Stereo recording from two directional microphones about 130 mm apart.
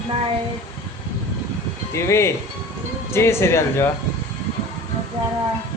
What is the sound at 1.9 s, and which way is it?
A man's voice, 20° left (ahead or behind).